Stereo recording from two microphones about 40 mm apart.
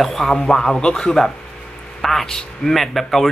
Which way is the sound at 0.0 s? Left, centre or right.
Centre.